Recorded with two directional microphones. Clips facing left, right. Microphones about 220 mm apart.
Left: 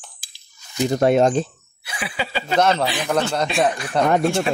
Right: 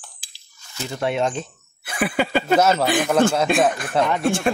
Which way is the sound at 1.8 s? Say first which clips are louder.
Right 7 dB; 50° right (ahead or behind).